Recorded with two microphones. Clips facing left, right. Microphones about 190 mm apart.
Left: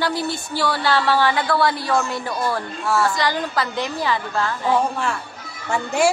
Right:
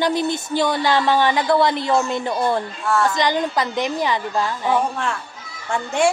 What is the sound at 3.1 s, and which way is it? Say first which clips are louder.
Speech: right 2 dB; 20° right (ahead or behind).